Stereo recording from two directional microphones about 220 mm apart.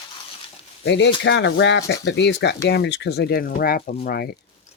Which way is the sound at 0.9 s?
50° left (ahead or behind).